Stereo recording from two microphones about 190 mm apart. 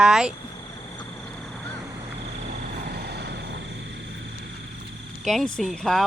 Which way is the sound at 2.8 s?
55° right (ahead or behind).